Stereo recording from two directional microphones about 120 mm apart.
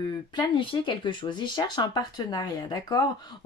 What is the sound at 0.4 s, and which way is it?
Speech, 45° left (ahead or behind).